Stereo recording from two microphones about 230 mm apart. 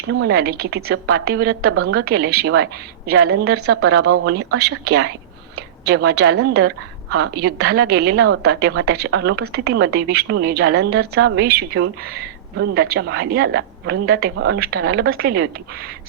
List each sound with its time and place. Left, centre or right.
0.1 s a woman's voice: right
5.5 s a sound: right
6.4 s a woman's voice: right